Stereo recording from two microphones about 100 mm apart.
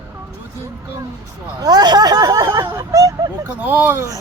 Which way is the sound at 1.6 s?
40° right (ahead or behind).